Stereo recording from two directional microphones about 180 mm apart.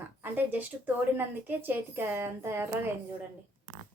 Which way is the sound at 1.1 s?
10° right (ahead or behind).